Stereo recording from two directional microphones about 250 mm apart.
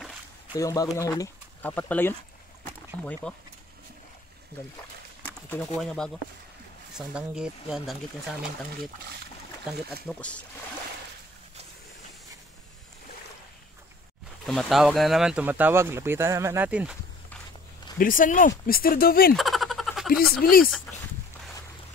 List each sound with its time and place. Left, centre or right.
0.5 s a man's voice: centre
5.8 s speech: centre
10.0 s speech: centre
14.4 s speech: centre
17.9 s speech: left
19.3 s a sound: centre
20.1 s speech: left